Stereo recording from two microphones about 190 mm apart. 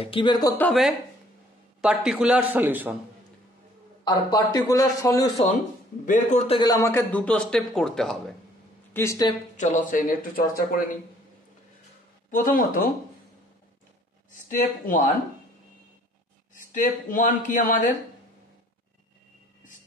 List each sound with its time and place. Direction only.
0.0 s a man's voice: 25° left (ahead or behind)
0.7 s a man's voice: centre (ahead or behind)
4.0 s a man's voice: 20° left (ahead or behind)
6.0 s a man's voice: 40° left (ahead or behind); by 8.4 s centre (ahead or behind)
8.9 s a man's voice: 15° left (ahead or behind)
9.6 s speech: 45° left (ahead or behind)
12.3 s speech: 45° left (ahead or behind)
14.3 s speech: 40° left (ahead or behind)
16.7 s speech: 45° left (ahead or behind)